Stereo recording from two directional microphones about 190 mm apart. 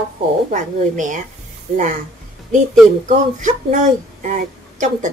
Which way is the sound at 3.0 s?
40° right (ahead or behind).